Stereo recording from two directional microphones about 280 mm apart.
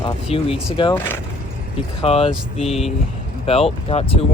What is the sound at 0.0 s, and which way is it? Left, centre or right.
Speech, centre.